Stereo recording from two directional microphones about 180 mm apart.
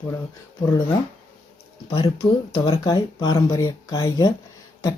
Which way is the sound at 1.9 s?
25° left (ahead or behind).